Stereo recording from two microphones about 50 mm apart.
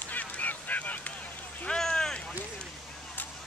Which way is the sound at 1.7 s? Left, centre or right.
Centre.